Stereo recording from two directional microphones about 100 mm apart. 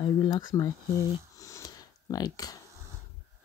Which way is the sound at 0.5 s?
35° left (ahead or behind).